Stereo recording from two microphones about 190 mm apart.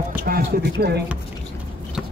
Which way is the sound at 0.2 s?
50° right (ahead or behind).